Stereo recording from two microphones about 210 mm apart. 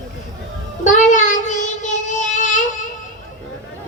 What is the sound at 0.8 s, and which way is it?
Child singing, 35° left (ahead or behind).